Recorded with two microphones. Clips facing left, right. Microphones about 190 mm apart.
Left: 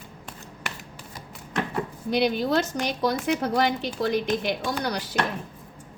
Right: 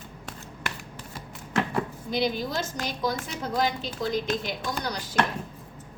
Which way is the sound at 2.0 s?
65° left (ahead or behind).